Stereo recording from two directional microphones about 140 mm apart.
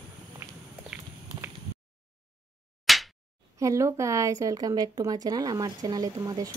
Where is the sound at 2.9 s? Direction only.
Centre (ahead or behind).